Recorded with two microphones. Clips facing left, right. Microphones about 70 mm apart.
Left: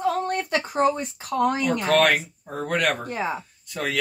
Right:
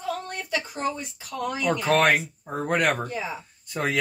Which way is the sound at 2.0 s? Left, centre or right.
Centre.